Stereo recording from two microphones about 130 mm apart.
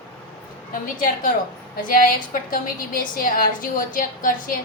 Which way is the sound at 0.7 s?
90° left.